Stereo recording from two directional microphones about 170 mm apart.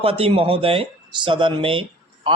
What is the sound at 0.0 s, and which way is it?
Speech, 35° right (ahead or behind).